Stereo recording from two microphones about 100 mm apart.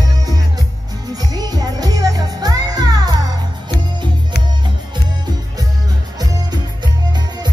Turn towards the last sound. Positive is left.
turn(degrees=-45)  # may be behind; listen again after turning